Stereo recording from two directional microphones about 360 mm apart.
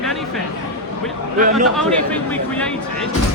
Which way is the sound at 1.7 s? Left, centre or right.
Centre.